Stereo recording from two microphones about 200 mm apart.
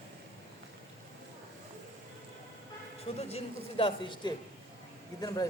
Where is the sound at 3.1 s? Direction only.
30° left (ahead or behind).